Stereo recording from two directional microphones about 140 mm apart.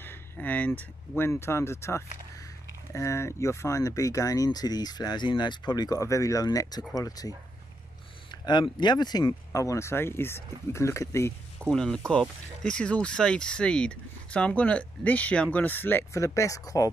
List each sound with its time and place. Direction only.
0.0 s speech: 10° left (ahead or behind)
11.7 s speech: 5° left (ahead or behind); by 16.9 s 25° left (ahead or behind)